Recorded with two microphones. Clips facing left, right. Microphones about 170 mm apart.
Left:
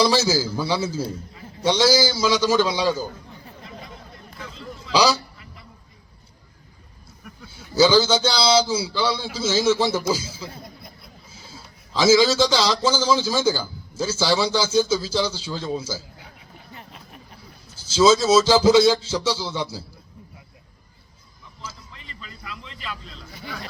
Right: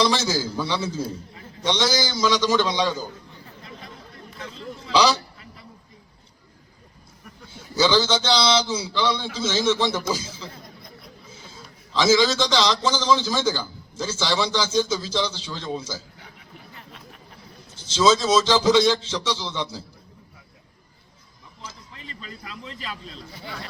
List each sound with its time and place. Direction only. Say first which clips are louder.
0.2 s a man's voice: left 3 dB; 5° left (ahead or behind)
7.8 s a man's voice: left 4 dB; 10° left (ahead or behind)
11.9 s a man's voice: left 3 dB; 5° left (ahead or behind)
17.7 s a man's voice: left 3 dB; 5° left (ahead or behind)
21.9 s a man's voice: right 3 dB; 35° right (ahead or behind)